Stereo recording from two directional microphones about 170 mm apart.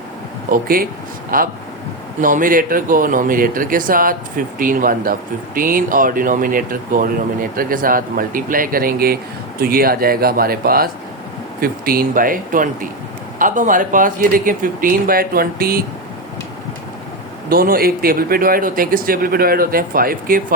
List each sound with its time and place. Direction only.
0.5 s speech: 60° right (ahead or behind)
17.5 s speech: 60° right (ahead or behind)